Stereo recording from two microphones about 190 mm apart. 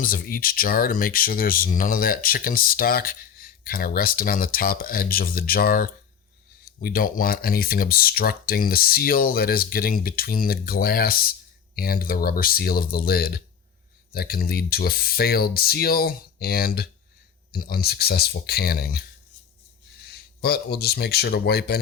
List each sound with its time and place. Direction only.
0.0 s speech: 50° left (ahead or behind)
20.1 s speech: 55° left (ahead or behind)